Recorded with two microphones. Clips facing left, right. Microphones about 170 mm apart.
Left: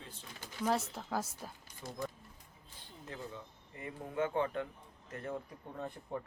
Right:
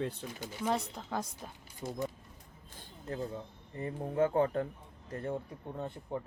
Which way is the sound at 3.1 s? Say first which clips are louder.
Right 8 dB; 35° right (ahead or behind).